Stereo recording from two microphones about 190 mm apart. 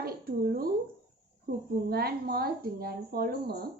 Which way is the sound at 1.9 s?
55° right (ahead or behind).